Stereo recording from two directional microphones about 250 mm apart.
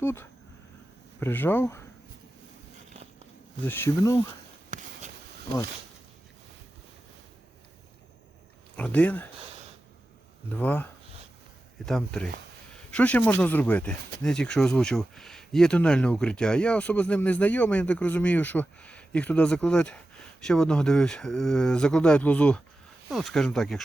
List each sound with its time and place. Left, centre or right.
0.0 s speech: centre
3.7 s speech: centre
4.7 s a sound: right
8.7 s speech: centre
10.5 s speech: centre
11.9 s speech: centre